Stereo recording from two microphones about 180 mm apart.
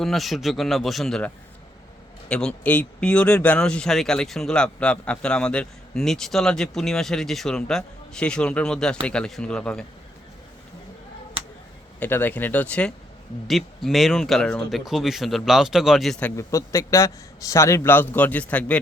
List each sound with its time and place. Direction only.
0.0 s speech: centre (ahead or behind)
2.3 s speech: 5° left (ahead or behind)
11.9 s a man's voice: 10° left (ahead or behind)
16.3 s a man's voice: 15° left (ahead or behind)